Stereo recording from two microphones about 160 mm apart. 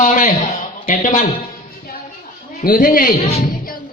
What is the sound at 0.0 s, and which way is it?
A man's voice, 55° left (ahead or behind).